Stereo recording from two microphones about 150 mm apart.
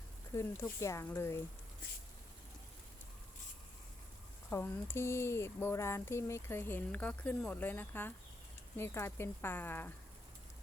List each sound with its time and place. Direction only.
0.3 s speech: 20° left (ahead or behind)
4.4 s speech: 15° left (ahead or behind)